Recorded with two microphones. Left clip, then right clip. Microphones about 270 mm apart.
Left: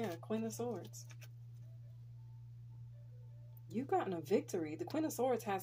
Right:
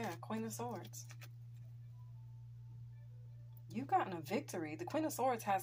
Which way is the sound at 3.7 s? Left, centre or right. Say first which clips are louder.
Right 1 dB; right.